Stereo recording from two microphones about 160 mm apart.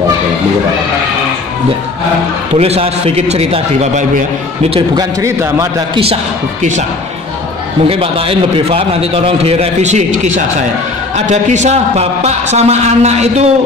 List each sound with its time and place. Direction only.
2.5 s a man's voice: 40° right (ahead or behind)
5.2 s a man's voice: 20° right (ahead or behind)
7.9 s a man's voice: 35° right (ahead or behind)